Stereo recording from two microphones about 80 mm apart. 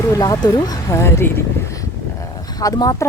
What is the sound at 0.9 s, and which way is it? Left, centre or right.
Speech, left.